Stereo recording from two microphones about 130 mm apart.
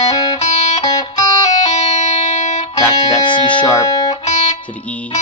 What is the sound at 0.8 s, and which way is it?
Music, 30° left (ahead or behind).